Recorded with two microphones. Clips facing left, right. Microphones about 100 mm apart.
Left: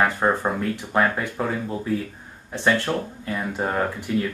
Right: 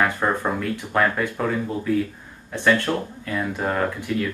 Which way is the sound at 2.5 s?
25° left (ahead or behind).